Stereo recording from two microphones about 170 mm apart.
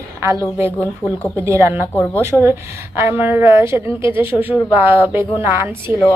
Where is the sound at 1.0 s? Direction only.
15° left (ahead or behind).